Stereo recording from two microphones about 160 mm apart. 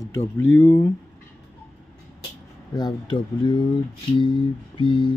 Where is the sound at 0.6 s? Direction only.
15° left (ahead or behind).